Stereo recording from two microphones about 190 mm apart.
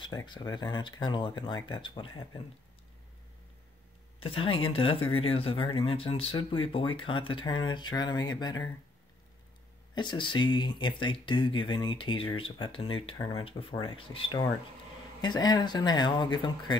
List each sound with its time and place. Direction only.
0.0 s speech: 25° left (ahead or behind)
4.2 s speech: 30° left (ahead or behind)
9.9 s speech: 25° left (ahead or behind)